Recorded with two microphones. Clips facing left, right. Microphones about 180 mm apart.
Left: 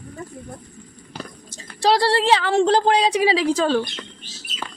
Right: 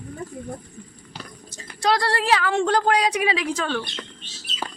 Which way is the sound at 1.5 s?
30° left (ahead or behind).